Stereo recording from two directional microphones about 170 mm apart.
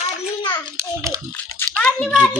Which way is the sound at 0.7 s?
15° right (ahead or behind).